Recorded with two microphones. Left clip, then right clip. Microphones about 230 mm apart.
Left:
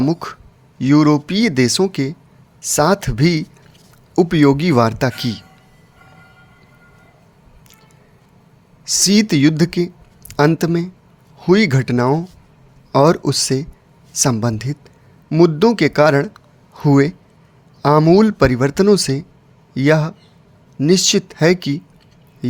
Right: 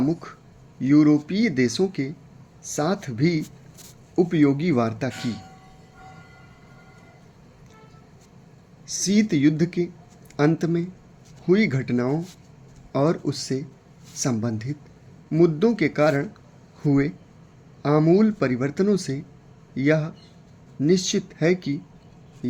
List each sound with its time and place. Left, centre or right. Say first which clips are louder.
0.0 s speech: left 6 dB; left
8.8 s speech: left 9 dB; left